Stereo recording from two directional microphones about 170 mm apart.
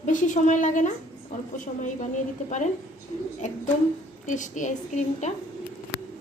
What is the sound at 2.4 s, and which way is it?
Speech, 45° left (ahead or behind).